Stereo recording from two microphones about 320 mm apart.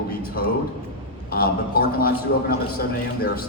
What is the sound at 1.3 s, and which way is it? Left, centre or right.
A man's voice, left.